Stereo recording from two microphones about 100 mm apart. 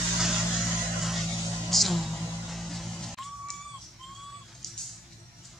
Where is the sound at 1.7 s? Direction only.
Centre (ahead or behind).